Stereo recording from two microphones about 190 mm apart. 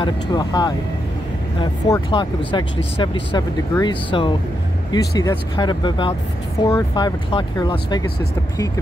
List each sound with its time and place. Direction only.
0.0 s speech: 20° left (ahead or behind)